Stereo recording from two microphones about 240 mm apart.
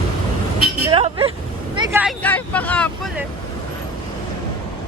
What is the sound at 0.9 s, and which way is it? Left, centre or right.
Vehicle, right.